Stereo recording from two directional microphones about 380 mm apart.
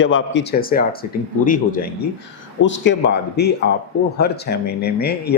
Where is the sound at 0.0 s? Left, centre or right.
Left.